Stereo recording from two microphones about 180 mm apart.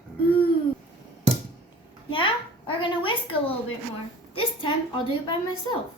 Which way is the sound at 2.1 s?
30° left (ahead or behind).